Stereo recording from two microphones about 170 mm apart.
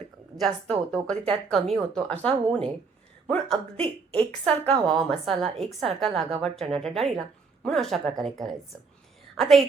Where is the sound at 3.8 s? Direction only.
35° right (ahead or behind).